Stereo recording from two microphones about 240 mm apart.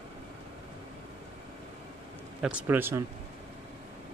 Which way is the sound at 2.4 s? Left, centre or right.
Centre.